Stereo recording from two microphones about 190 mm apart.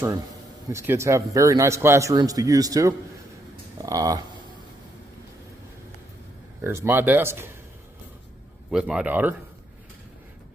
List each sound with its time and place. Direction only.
0.7 s a man's voice: 15° right (ahead or behind)
6.6 s a man's voice: 15° right (ahead or behind)
8.6 s speech: 5° right (ahead or behind)